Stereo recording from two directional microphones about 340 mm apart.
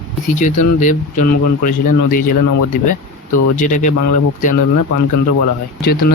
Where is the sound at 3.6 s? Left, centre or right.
Left.